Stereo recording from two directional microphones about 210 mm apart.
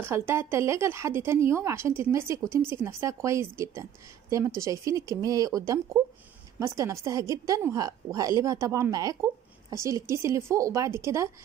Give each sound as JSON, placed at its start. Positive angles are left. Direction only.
{"t": 0.0, "sound": "a woman's voice", "side_deg": -10}